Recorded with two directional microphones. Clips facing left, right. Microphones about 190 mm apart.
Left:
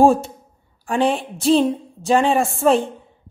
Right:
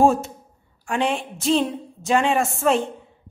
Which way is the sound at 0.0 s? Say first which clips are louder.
Left 3 dB; 30° left (ahead or behind).